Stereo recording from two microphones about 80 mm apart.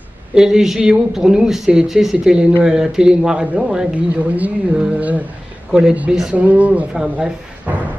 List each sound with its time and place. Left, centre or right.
0.3 s speech: centre